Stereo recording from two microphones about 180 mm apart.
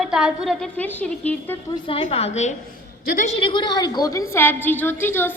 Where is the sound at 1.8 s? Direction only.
30° left (ahead or behind).